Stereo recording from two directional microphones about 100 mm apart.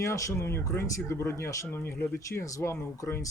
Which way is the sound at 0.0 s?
30° left (ahead or behind).